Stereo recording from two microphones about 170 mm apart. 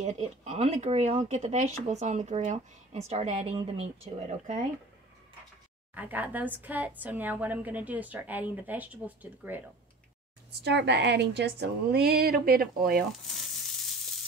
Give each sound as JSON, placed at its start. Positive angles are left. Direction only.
{"t": 0.0, "sound": "speech", "side_deg": -40}
{"t": 5.9, "sound": "a woman's voice", "side_deg": -10}
{"t": 10.5, "sound": "speech", "side_deg": -80}